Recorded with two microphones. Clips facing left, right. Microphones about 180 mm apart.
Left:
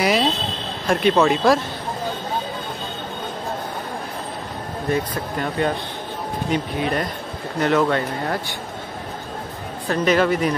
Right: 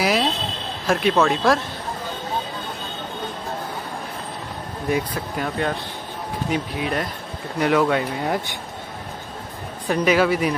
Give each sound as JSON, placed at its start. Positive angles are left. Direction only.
{"t": 0.0, "sound": "a sound", "side_deg": 0}
{"t": 0.8, "sound": "speech", "side_deg": 0}
{"t": 4.8, "sound": "speech", "side_deg": -10}
{"t": 9.8, "sound": "speech", "side_deg": -10}